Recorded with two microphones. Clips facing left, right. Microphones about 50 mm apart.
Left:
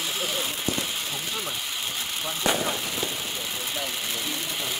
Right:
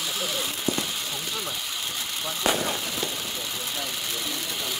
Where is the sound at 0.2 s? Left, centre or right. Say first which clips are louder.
Even; centre.